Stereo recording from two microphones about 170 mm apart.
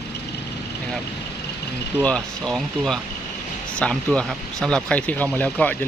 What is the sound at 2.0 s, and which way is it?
Speech, 5° left (ahead or behind).